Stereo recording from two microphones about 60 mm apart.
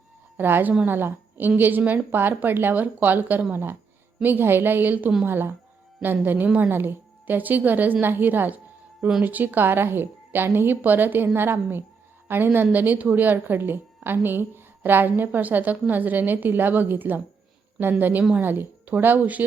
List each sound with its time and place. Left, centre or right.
0.3 s a woman's voice: right